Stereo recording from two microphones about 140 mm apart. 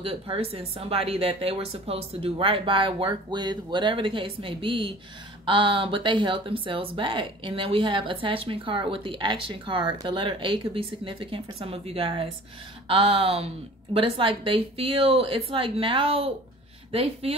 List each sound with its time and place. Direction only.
0.0 s a woman's voice: 40° right (ahead or behind)